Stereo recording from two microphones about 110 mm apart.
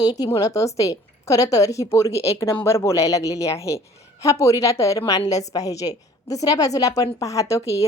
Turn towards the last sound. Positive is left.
turn(degrees=25)  # may be behind; listen again after turning